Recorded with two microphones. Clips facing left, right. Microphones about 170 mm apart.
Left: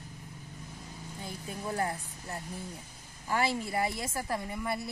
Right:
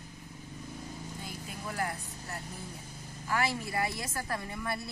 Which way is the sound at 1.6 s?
25° left (ahead or behind).